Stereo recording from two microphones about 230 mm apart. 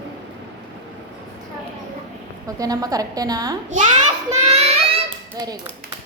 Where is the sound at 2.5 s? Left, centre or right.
Centre.